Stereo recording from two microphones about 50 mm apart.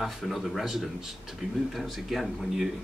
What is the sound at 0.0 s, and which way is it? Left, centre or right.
A man's voice, centre.